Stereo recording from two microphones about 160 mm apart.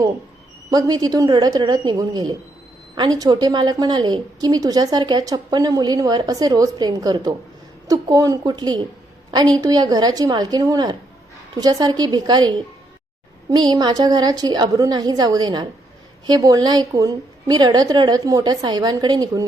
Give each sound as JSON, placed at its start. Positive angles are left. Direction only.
{"t": 0.7, "sound": "a woman's voice", "side_deg": -25}